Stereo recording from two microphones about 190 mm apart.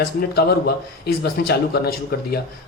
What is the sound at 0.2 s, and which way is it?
Speech, 55° left (ahead or behind).